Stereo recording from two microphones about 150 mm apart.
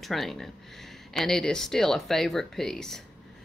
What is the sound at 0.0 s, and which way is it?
Speech, centre (ahead or behind).